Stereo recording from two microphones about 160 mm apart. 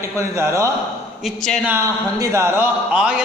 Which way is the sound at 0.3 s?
20° right (ahead or behind).